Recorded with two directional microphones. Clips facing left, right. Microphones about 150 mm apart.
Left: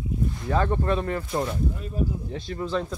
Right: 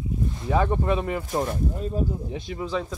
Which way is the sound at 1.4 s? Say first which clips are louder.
Right 2 dB; 35° right (ahead or behind).